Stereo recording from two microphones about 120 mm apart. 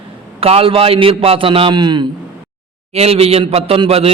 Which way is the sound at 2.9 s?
60° right (ahead or behind).